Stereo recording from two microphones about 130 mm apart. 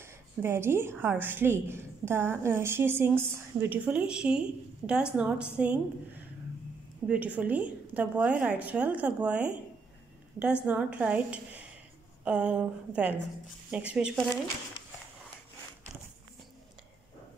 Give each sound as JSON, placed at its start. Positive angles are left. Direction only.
{"t": 0.0, "sound": "a woman's voice", "side_deg": -20}
{"t": 7.1, "sound": "a woman's voice", "side_deg": -10}